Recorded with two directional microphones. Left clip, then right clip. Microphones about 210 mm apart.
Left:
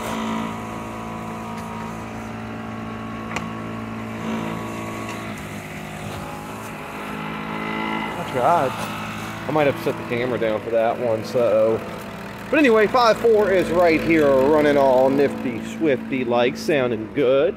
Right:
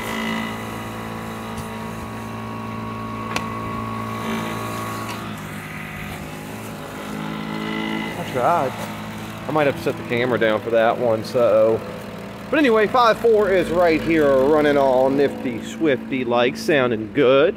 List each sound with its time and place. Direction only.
8.4 s speech: centre (ahead or behind)
10.0 s speech: 15° right (ahead or behind)
10.3 s speech: 30° right (ahead or behind)
11.3 s speech: 15° right (ahead or behind)
12.5 s speech: 5° left (ahead or behind); by 17.6 s 30° right (ahead or behind)